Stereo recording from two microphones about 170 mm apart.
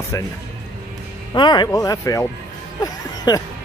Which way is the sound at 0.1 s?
20° left (ahead or behind).